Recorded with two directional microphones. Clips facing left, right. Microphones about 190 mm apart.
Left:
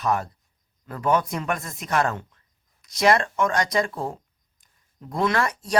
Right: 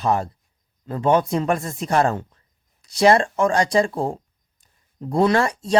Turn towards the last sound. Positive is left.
turn(degrees=-25)  # may be behind; listen again after turning